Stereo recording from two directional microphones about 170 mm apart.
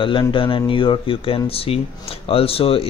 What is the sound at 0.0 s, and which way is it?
Speech, 30° left (ahead or behind).